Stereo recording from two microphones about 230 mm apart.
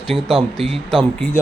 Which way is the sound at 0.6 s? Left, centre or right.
Centre.